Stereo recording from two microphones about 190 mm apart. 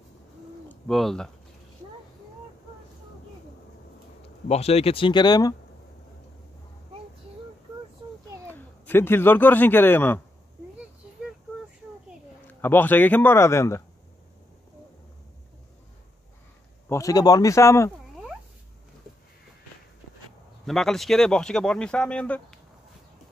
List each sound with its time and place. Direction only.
0.7 s speech: centre (ahead or behind)
4.5 s speech: 35° left (ahead or behind)
8.5 s speech: 10° left (ahead or behind)
12.6 s speech: 10° left (ahead or behind)
16.9 s speech: 20° left (ahead or behind)
20.6 s speech: centre (ahead or behind)